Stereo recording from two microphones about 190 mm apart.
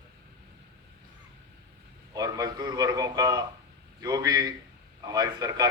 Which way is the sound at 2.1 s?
20° right (ahead or behind).